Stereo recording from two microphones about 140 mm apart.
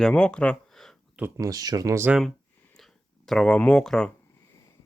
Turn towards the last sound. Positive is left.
turn(degrees=5)  # may be behind; listen again after turning